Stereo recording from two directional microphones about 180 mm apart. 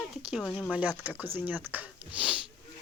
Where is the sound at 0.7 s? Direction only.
10° right (ahead or behind).